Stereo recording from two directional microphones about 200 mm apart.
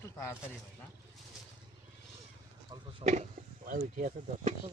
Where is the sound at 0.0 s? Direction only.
10° left (ahead or behind).